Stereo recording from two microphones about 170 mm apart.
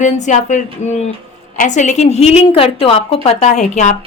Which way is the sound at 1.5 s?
45° left (ahead or behind).